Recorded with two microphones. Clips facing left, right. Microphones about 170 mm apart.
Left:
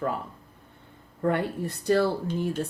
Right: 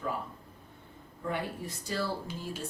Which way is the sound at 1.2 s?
60° left (ahead or behind).